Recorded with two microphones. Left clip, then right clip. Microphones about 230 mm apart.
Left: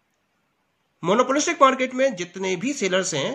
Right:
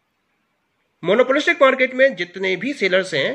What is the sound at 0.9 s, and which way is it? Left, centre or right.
Speech, left.